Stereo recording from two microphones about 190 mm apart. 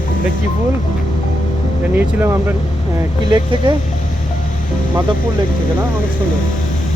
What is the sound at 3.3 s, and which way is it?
Speech, 25° right (ahead or behind).